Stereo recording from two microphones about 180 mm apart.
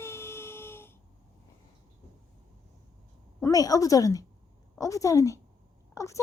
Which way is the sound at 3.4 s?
20° left (ahead or behind).